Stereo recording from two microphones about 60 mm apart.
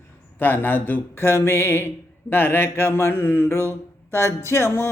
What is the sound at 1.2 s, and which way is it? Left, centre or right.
Mantra, left.